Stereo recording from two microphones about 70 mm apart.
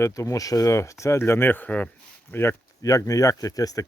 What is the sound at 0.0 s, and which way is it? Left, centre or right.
Speech, left.